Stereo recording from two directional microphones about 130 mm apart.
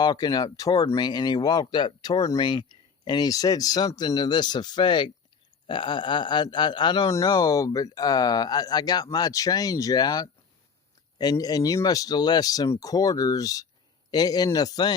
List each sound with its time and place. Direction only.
0.0 s speech: 30° left (ahead or behind)